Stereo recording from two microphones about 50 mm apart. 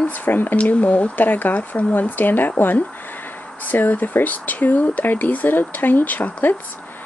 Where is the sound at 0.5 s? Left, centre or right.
Left.